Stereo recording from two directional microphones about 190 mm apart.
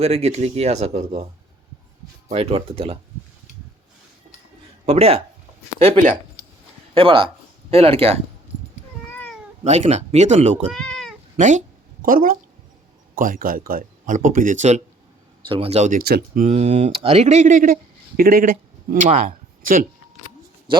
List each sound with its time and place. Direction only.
0.0 s speech: 35° right (ahead or behind)
2.3 s speech: 30° right (ahead or behind)
4.9 s speech: 30° right (ahead or behind)
9.0 s cat: 10° left (ahead or behind)
9.6 s speech: 35° right (ahead or behind)
10.7 s cat: centre (ahead or behind)
11.3 s speech: 40° right (ahead or behind)
15.4 s speech: 30° right (ahead or behind); by 16.4 s 55° right (ahead or behind)
16.4 s speech: 35° right (ahead or behind)
20.7 s speech: 25° right (ahead or behind)